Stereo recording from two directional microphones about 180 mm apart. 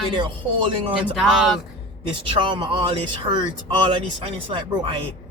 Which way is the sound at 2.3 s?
30° right (ahead or behind).